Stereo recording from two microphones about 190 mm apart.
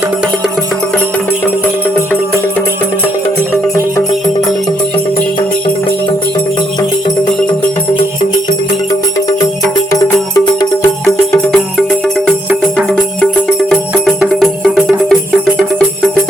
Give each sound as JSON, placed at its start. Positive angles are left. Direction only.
{"t": 9.9, "sound": "music", "side_deg": 15}
{"t": 13.7, "sound": "music", "side_deg": 0}